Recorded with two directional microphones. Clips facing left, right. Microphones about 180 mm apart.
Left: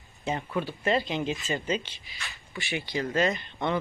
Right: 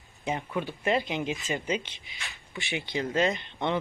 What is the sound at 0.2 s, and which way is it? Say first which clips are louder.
Speech: left 1 dB; 15° right (ahead or behind).